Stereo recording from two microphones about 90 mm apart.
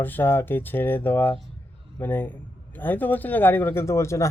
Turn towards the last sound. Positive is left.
turn(degrees=30)  # may be behind; listen again after turning